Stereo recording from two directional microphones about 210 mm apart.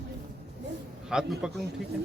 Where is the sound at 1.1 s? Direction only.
Centre (ahead or behind).